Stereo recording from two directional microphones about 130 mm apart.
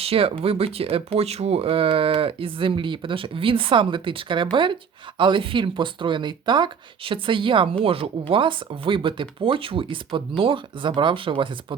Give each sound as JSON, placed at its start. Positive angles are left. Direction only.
{"t": 0.0, "sound": "speech", "side_deg": -45}